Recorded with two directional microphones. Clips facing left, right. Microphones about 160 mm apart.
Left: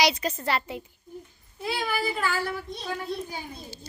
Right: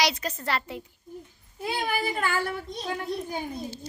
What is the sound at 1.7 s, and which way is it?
Speech, 50° right (ahead or behind).